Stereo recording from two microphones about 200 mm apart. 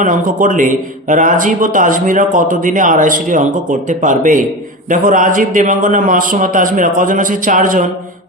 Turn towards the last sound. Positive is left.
turn(degrees=-40)  # may be behind; listen again after turning